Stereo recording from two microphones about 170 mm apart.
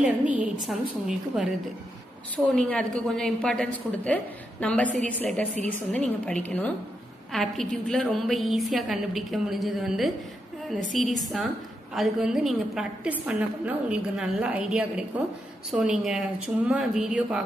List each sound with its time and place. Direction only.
0.0 s a woman's voice: 10° right (ahead or behind)